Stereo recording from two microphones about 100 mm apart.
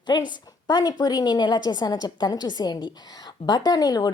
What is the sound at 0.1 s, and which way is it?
A woman's voice, 45° left (ahead or behind).